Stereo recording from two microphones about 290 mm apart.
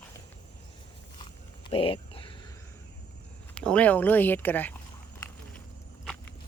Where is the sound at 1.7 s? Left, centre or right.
Centre.